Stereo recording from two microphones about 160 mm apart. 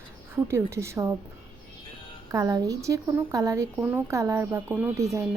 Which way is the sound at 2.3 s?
20° right (ahead or behind).